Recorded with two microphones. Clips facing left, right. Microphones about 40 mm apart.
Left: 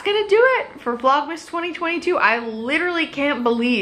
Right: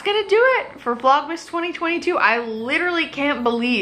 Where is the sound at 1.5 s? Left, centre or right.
Centre.